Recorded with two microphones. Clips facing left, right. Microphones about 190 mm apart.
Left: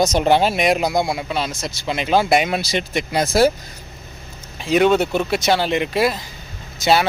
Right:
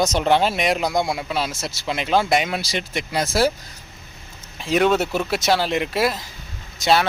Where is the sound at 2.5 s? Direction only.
20° left (ahead or behind).